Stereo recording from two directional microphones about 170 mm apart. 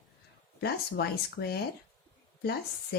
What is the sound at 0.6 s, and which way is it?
Speech, 70° left (ahead or behind).